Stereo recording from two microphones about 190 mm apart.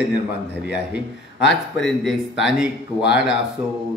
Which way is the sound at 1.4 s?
Centre (ahead or behind).